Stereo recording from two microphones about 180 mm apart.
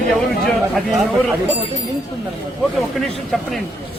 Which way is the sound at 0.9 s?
Centre (ahead or behind).